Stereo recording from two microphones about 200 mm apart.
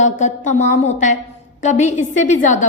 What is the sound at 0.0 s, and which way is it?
A woman's voice, 35° left (ahead or behind).